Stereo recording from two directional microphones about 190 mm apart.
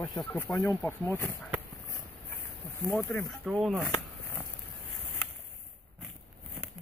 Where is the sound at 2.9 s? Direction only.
10° left (ahead or behind).